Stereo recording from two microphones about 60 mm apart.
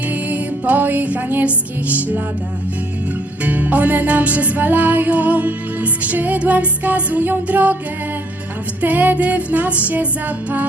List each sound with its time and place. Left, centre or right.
0.1 s music: right
3.4 s music: right
8.8 s music: right